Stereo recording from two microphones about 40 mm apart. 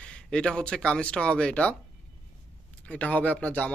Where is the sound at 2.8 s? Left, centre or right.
Left.